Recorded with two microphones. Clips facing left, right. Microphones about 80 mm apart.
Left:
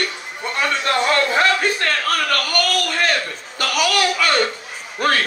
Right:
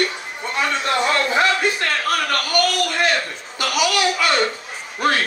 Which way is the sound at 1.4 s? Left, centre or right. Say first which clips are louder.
Left 1 dB; left.